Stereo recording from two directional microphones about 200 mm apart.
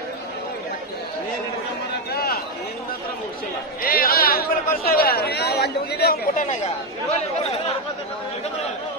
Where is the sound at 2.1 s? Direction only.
50° left (ahead or behind).